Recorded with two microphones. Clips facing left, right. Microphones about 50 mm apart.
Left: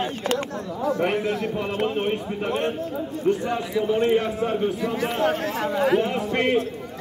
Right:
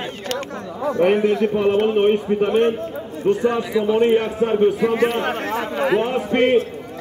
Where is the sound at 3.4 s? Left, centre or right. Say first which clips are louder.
Right 7 dB; right.